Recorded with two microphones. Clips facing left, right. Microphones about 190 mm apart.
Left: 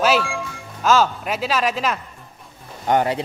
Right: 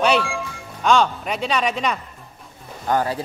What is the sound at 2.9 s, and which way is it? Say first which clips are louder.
Speech: left 2 dB; 20° left (ahead or behind).